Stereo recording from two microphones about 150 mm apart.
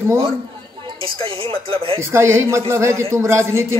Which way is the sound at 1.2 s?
35° right (ahead or behind).